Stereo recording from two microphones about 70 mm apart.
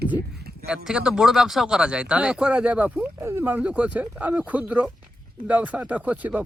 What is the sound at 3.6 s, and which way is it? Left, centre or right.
Speech, centre.